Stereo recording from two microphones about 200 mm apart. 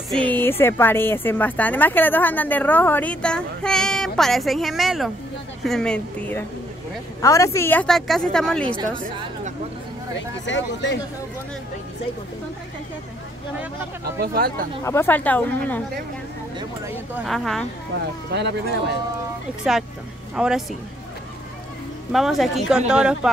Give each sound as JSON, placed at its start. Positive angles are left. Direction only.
{"t": 0.1, "sound": "a woman's voice", "side_deg": 10}
{"t": 10.4, "sound": "speech", "side_deg": 65}
{"t": 14.2, "sound": "speech", "side_deg": -50}
{"t": 14.8, "sound": "speech", "side_deg": 15}
{"t": 16.5, "sound": "speech", "side_deg": -15}
{"t": 17.3, "sound": "a woman's voice", "side_deg": 0}
{"t": 18.3, "sound": "speech", "side_deg": -60}
{"t": 20.3, "sound": "a woman's voice", "side_deg": -5}
{"t": 22.1, "sound": "a woman's voice", "side_deg": 0}